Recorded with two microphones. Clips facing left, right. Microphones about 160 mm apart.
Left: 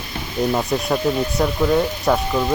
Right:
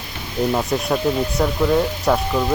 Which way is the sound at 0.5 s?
Centre (ahead or behind).